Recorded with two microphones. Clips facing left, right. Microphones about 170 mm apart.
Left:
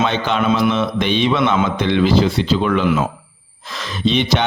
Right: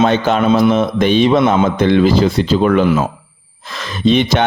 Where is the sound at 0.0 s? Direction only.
45° right (ahead or behind).